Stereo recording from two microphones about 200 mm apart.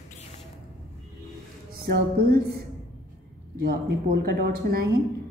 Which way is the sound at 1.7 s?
45° right (ahead or behind).